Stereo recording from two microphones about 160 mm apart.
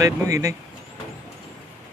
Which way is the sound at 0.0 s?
20° right (ahead or behind).